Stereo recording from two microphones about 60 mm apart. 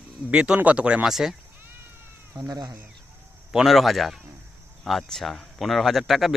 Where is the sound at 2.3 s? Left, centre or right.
Right.